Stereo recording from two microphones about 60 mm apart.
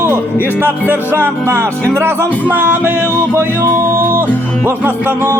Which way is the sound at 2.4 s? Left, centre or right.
Right.